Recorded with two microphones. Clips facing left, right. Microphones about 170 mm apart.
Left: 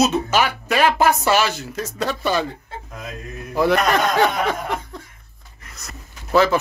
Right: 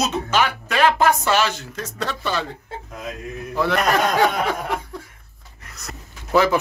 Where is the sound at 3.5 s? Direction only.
15° left (ahead or behind).